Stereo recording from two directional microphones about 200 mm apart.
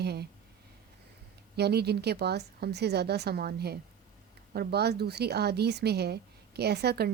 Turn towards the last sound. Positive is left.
turn(degrees=-55)  # may be behind; listen again after turning